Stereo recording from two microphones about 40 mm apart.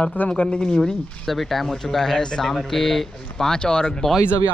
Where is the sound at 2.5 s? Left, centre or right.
Centre.